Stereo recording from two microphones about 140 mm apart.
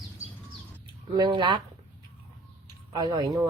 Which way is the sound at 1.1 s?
30° right (ahead or behind).